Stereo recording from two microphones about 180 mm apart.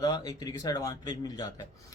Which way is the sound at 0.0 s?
20° left (ahead or behind).